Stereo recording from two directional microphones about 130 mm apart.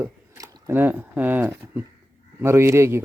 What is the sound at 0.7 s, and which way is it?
A man's voice, 15° right (ahead or behind).